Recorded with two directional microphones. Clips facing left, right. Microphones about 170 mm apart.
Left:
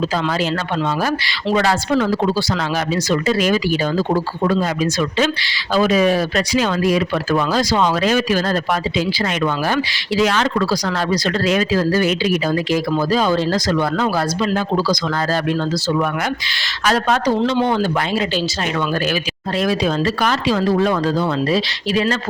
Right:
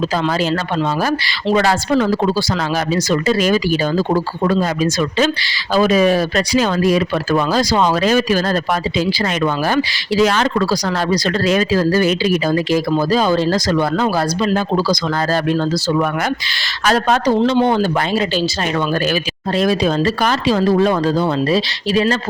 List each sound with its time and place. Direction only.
1.5 s speech: 35° right (ahead or behind)
16.8 s speech: 35° right (ahead or behind)
19.8 s speech: 35° right (ahead or behind)